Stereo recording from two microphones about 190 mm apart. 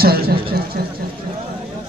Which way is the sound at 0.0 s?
55° right (ahead or behind).